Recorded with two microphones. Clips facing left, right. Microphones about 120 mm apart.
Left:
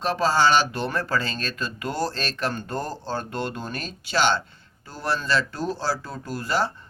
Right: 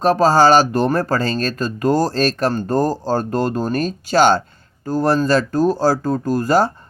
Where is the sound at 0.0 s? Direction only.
40° right (ahead or behind).